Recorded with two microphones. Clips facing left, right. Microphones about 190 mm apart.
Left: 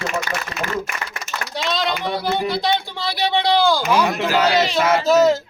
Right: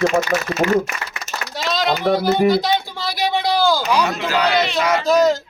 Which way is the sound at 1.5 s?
Centre (ahead or behind).